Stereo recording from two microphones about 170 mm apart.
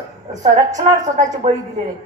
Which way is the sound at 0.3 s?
45° right (ahead or behind).